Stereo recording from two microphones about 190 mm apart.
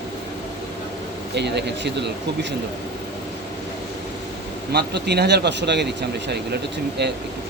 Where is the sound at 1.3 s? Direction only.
65° right (ahead or behind).